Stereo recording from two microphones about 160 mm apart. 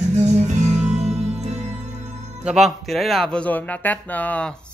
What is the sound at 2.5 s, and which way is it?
Speech, centre (ahead or behind).